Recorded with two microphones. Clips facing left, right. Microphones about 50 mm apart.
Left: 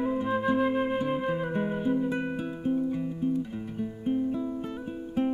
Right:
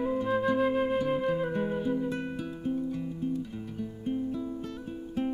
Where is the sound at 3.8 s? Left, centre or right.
Centre.